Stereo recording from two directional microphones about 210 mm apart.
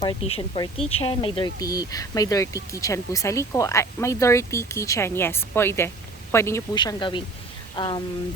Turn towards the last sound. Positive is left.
turn(degrees=20)  # may be behind; listen again after turning